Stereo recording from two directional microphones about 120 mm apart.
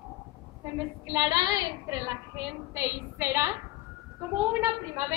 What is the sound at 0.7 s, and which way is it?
A woman's voice, 25° right (ahead or behind).